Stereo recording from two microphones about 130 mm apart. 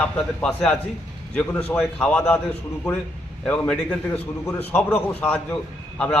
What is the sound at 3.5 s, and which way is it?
A man's voice, 10° left (ahead or behind).